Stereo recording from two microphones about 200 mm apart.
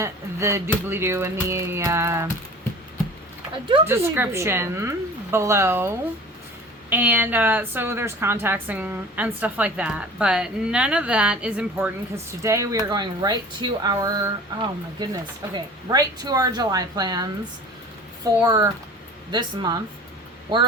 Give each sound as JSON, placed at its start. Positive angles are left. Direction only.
{"t": 0.0, "sound": "a woman's voice", "side_deg": -15}
{"t": 3.8, "sound": "a woman's voice", "side_deg": -10}
{"t": 6.9, "sound": "a woman's voice", "side_deg": -10}
{"t": 18.4, "sound": "speech", "side_deg": -20}